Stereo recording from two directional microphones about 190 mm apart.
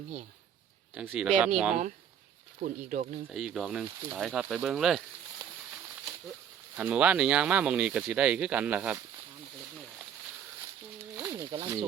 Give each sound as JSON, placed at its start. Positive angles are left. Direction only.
{"t": 0.9, "sound": "speech", "side_deg": -5}
{"t": 2.6, "sound": "speech", "side_deg": -45}
{"t": 3.3, "sound": "speech", "side_deg": 0}
{"t": 6.7, "sound": "speech", "side_deg": -5}
{"t": 11.2, "sound": "speech", "side_deg": -15}